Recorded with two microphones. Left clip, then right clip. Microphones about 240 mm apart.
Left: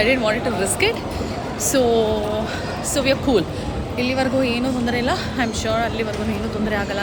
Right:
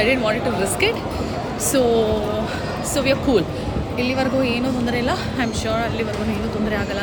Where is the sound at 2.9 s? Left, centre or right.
Centre.